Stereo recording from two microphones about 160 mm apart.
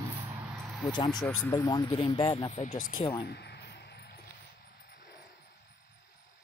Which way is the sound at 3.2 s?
90° left.